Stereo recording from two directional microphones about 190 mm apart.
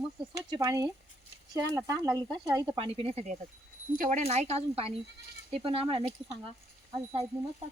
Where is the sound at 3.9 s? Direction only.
45° right (ahead or behind).